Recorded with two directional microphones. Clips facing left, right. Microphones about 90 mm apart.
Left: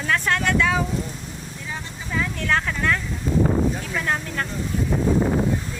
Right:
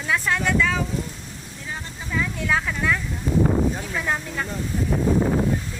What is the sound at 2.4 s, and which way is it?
Speech, 5° right (ahead or behind).